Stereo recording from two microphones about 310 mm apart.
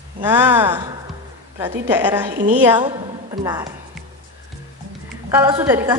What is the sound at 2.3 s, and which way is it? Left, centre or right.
A woman's voice, right.